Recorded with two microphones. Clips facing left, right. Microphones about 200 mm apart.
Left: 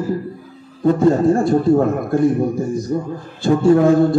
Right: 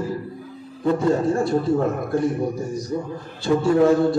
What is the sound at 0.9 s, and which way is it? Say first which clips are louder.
A man's voice: left 6 dB; 50° left (ahead or behind).